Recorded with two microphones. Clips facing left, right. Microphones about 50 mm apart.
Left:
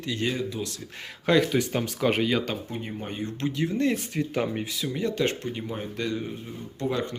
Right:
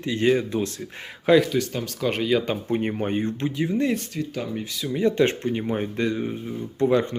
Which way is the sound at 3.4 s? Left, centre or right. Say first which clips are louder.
Even; centre.